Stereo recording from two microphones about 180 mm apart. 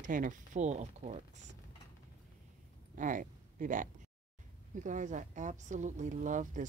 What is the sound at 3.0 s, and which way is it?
Speech, 45° right (ahead or behind).